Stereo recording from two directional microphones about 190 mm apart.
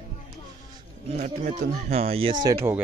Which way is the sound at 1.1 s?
40° right (ahead or behind).